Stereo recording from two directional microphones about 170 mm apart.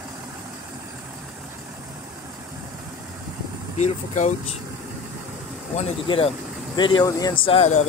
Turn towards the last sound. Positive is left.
turn(degrees=40)  # may be behind; listen again after turning